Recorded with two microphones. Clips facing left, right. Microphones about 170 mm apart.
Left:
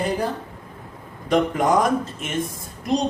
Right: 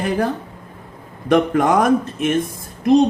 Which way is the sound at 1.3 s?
65° right (ahead or behind).